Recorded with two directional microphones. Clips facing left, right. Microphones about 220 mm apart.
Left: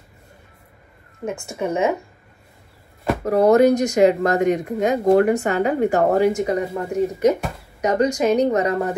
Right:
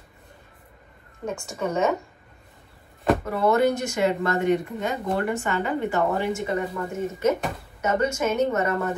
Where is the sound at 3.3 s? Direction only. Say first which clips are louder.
Left 10 dB; 40° left (ahead or behind).